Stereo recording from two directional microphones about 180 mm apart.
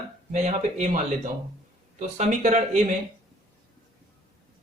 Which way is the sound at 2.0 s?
40° right (ahead or behind).